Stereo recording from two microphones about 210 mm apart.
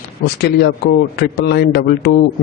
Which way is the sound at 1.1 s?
50° left (ahead or behind).